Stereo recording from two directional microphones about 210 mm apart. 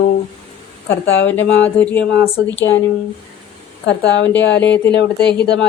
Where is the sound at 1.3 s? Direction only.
10° left (ahead or behind).